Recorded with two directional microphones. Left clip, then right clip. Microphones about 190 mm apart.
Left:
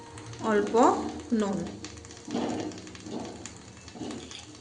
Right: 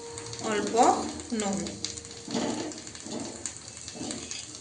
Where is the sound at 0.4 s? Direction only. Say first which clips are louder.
Left 1 dB; 35° left (ahead or behind).